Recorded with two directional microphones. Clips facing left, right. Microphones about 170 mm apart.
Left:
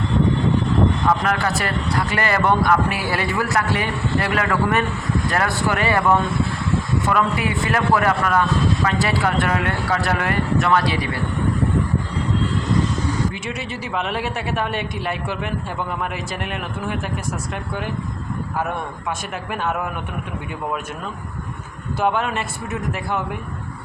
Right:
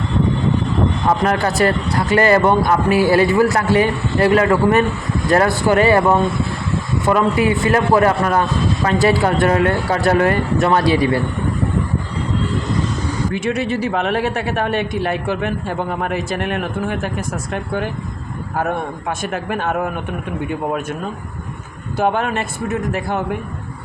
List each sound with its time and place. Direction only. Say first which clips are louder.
1.2 s a man's voice: right 6 dB; 35° right (ahead or behind)
13.3 s speech: right 9 dB; 50° right (ahead or behind)